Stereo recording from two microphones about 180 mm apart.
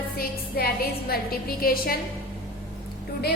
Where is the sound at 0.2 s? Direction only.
55° left (ahead or behind).